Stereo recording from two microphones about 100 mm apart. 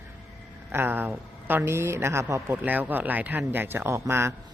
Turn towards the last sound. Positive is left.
turn(degrees=-25)  # may be behind; listen again after turning